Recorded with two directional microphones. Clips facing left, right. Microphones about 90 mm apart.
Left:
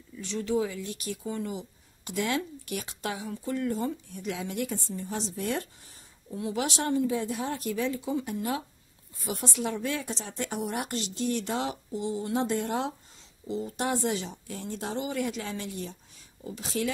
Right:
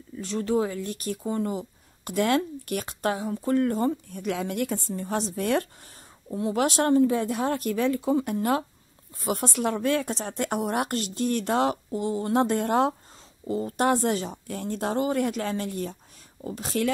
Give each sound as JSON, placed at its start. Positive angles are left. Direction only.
{"t": 0.1, "sound": "a woman's voice", "side_deg": -45}